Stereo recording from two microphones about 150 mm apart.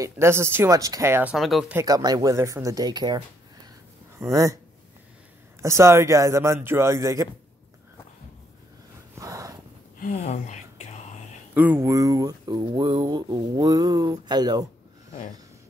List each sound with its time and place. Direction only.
0.0 s speech: 15° right (ahead or behind)
1.3 s speech: centre (ahead or behind)
1.7 s speech: 20° right (ahead or behind)
5.6 s speech: 20° right (ahead or behind)
9.2 s a sound: 20° right (ahead or behind)
10.2 s whispering: 50° left (ahead or behind)
11.5 s speech: 10° right (ahead or behind)